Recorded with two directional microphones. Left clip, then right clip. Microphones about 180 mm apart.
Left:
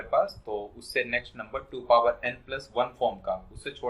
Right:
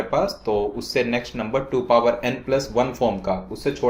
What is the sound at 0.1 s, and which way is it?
Speech, 45° right (ahead or behind).